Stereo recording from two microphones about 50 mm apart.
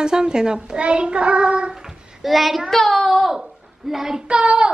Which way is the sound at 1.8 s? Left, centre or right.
Centre.